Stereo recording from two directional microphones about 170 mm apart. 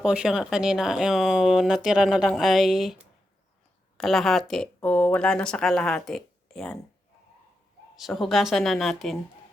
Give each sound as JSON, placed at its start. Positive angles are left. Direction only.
{"t": 0.0, "sound": "speech", "side_deg": -5}
{"t": 7.9, "sound": "speech", "side_deg": 0}